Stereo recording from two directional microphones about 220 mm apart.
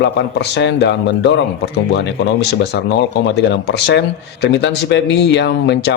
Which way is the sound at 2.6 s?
50° left (ahead or behind).